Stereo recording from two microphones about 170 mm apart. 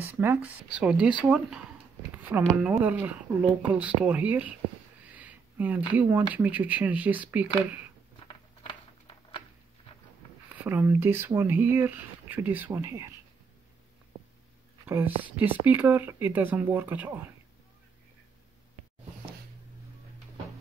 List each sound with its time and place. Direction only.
0.1 s speech: 10° right (ahead or behind)
2.5 s speech: 5° right (ahead or behind)
5.1 s a sound: 10° right (ahead or behind)
6.3 s speech: 10° right (ahead or behind)
8.3 s a sound: 30° left (ahead or behind)
10.6 s speech: 15° right (ahead or behind)
14.9 s speech: 15° right (ahead or behind)